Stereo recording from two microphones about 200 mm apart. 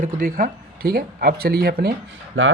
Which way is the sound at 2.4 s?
80° right.